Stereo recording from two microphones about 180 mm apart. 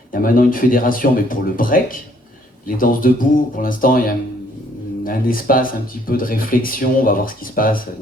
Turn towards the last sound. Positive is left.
turn(degrees=50)  # may be behind; listen again after turning